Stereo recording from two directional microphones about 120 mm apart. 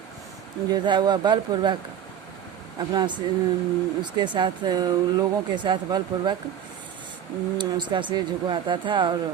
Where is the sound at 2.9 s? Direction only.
35° right (ahead or behind).